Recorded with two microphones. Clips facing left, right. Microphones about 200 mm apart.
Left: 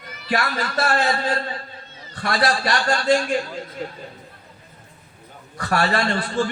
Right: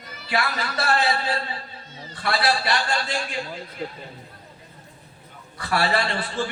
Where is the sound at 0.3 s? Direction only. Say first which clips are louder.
Left 2 dB; 45° left (ahead or behind).